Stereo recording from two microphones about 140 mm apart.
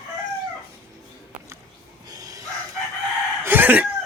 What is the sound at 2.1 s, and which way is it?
Chicken, 25° right (ahead or behind).